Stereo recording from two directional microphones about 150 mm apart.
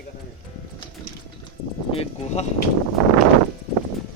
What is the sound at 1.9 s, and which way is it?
Speech, 45° left (ahead or behind).